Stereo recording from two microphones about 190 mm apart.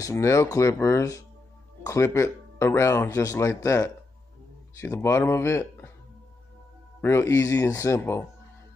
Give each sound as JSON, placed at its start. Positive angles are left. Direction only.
{"t": 0.0, "sound": "speech", "side_deg": 15}
{"t": 7.0, "sound": "speech", "side_deg": 15}